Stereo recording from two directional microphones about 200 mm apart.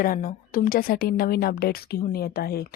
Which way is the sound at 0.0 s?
45° left (ahead or behind).